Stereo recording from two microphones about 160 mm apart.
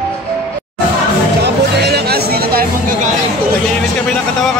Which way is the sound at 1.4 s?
90° right.